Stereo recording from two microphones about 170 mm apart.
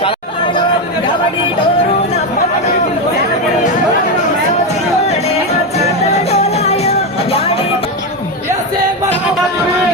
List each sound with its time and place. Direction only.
6.3 s music: 40° left (ahead or behind)